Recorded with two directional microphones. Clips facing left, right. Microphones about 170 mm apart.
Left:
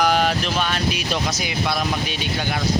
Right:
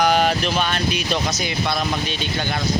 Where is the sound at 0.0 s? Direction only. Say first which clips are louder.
Right 1 dB; centre (ahead or behind).